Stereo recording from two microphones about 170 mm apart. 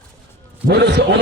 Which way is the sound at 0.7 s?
75° right (ahead or behind).